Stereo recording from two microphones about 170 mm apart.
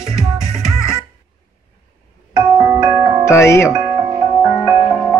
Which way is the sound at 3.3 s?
15° left (ahead or behind).